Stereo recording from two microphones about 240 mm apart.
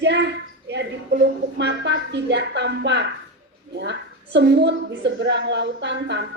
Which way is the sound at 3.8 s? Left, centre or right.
Right.